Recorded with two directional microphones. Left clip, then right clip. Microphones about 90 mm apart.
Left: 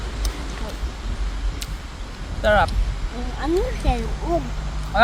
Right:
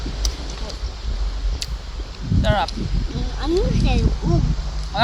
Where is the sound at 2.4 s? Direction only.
35° left (ahead or behind).